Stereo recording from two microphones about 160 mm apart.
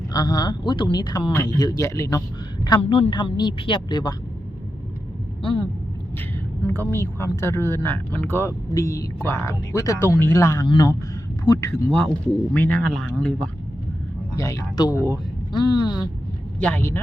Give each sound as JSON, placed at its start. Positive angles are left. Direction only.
{"t": 0.1, "sound": "speech", "side_deg": 25}
{"t": 5.4, "sound": "speech", "side_deg": 30}
{"t": 6.7, "sound": "speech", "side_deg": 15}
{"t": 11.9, "sound": "speech", "side_deg": 5}
{"t": 14.3, "sound": "speech", "side_deg": 20}
{"t": 16.6, "sound": "speech", "side_deg": 10}